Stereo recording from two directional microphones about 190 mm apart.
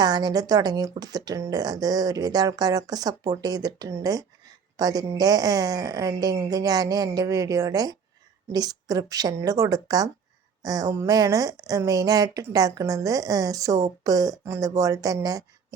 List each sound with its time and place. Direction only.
0.0 s speech: 20° right (ahead or behind)